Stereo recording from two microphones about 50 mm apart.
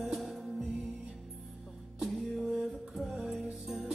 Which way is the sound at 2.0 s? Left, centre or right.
Centre.